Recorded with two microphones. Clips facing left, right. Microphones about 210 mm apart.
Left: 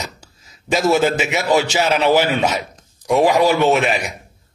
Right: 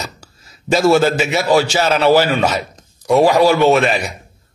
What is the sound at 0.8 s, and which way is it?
A man's voice, 20° left (ahead or behind).